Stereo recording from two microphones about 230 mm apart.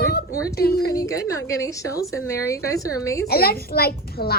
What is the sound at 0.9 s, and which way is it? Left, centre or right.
A woman's voice, centre.